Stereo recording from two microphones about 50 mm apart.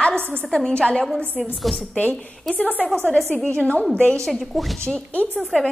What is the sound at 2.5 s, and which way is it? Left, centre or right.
Speech, left.